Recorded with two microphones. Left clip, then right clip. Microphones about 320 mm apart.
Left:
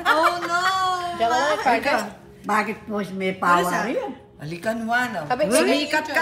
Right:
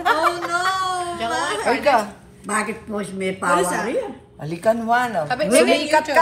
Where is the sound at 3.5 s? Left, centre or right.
Centre.